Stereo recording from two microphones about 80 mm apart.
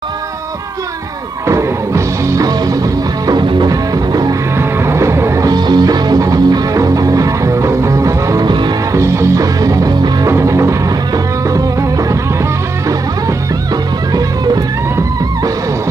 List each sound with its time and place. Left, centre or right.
1.5 s music: right
4.6 s music: right
5.5 s music: right
8.5 s music: right
8.9 s music: right